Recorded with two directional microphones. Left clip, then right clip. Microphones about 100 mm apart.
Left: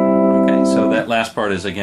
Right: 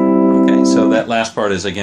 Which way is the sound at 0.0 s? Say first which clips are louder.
Right 1 dB; 35° left (ahead or behind).